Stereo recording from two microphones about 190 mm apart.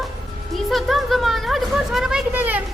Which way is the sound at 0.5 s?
Centre (ahead or behind).